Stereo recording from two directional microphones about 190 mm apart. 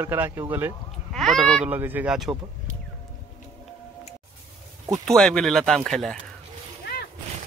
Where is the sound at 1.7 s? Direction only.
10° right (ahead or behind).